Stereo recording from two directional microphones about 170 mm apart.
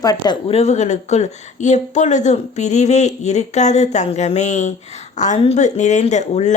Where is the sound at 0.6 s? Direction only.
45° left (ahead or behind).